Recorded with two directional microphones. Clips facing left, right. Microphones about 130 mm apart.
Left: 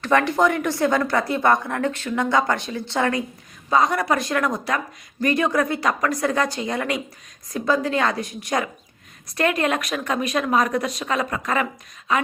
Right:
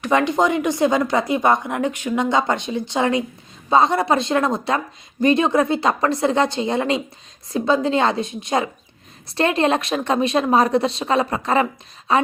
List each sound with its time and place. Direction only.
0.0 s speech: 20° right (ahead or behind)